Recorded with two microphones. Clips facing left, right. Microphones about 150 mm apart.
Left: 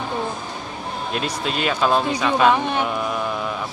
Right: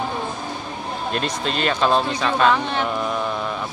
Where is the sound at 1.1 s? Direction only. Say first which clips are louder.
Even; 10° left (ahead or behind).